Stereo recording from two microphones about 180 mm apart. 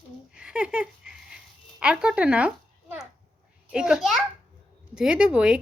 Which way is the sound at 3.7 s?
5° right (ahead or behind).